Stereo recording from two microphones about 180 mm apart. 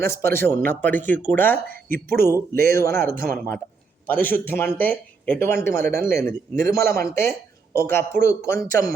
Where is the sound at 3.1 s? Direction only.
50° right (ahead or behind).